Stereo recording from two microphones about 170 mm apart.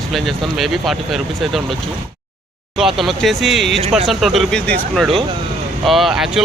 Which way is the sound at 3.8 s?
40° right (ahead or behind).